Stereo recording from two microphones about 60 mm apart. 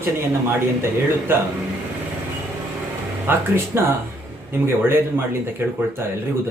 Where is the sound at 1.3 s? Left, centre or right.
Right.